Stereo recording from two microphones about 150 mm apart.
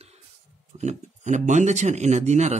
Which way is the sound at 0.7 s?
50° right (ahead or behind).